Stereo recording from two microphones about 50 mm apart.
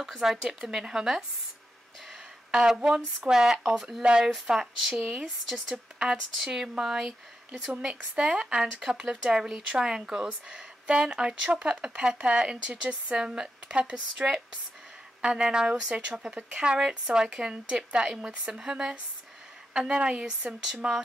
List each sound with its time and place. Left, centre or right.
0.0 s speech: centre
2.5 s speech: centre
4.0 s a woman's voice: centre
4.3 s a woman's voice: centre
20.2 s speech: centre